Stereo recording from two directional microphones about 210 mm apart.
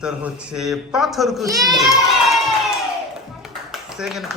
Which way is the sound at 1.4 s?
15° right (ahead or behind).